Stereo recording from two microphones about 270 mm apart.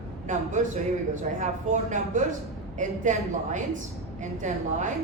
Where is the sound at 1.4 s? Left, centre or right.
Right.